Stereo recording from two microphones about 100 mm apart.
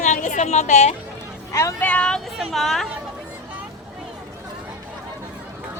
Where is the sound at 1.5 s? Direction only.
30° left (ahead or behind).